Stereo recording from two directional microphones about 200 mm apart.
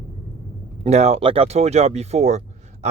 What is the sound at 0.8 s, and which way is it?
Speech, 35° right (ahead or behind).